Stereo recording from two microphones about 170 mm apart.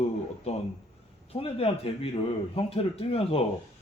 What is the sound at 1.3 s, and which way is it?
Speech, 35° left (ahead or behind).